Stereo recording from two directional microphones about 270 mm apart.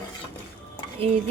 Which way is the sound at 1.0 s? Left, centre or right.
Right.